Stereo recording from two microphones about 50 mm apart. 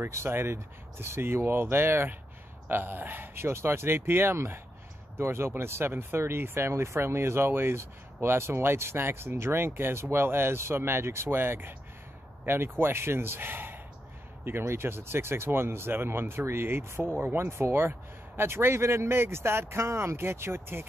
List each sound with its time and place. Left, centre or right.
0.1 s speech: right